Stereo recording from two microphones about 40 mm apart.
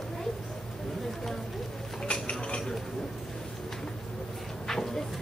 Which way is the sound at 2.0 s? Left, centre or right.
Left.